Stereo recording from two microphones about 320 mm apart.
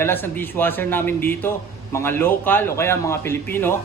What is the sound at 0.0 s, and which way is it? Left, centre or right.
A man's voice, centre.